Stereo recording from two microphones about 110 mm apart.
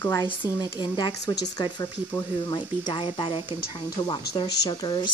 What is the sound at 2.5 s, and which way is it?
Speech, 50° left (ahead or behind).